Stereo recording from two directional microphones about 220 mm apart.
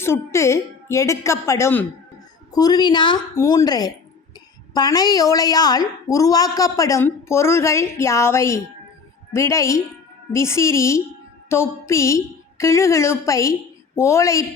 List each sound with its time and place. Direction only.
0.0 s a woman's voice: 10° left (ahead or behind)